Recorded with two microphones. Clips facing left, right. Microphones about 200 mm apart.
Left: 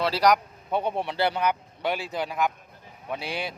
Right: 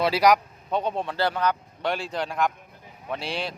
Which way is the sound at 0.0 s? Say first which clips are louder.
Right 2 dB; 10° right (ahead or behind).